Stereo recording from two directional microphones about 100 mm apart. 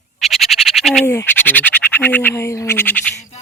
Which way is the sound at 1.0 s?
25° left (ahead or behind).